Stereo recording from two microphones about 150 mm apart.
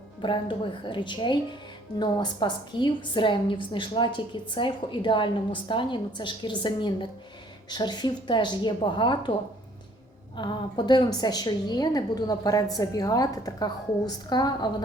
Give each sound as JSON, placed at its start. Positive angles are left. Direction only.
{"t": 0.2, "sound": "a woman's voice", "side_deg": 35}
{"t": 10.3, "sound": "a woman's voice", "side_deg": 30}